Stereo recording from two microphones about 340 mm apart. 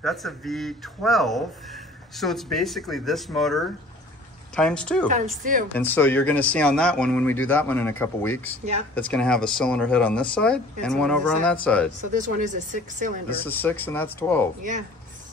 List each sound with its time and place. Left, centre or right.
0.0 s speech: centre
5.1 s speech: right
5.7 s speech: centre
12.1 s speech: right
13.5 s speech: centre